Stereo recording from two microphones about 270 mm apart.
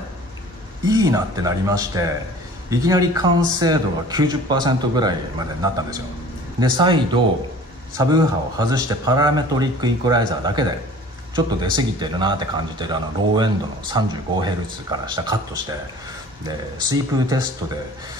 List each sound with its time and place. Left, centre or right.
0.8 s speech: centre
8.0 s speech: centre